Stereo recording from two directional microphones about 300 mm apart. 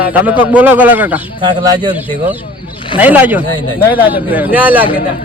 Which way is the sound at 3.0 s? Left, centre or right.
Centre.